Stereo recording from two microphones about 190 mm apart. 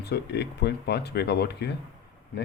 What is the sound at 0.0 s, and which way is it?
Speech, 60° left (ahead or behind).